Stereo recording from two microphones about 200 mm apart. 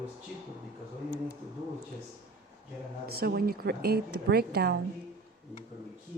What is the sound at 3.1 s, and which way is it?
A woman's voice, 50° right (ahead or behind).